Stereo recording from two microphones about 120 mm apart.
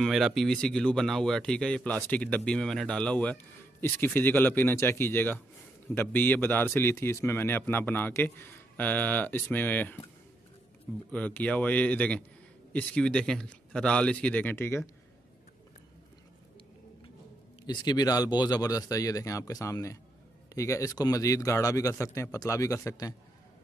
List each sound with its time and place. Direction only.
0.0 s a man's voice: centre (ahead or behind); by 9.9 s 15° left (ahead or behind)
11.1 s a man's voice: 10° left (ahead or behind)
17.6 s speech: 35° left (ahead or behind)